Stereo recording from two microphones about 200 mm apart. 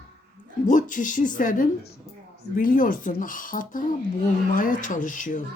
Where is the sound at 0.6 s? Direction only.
40° left (ahead or behind).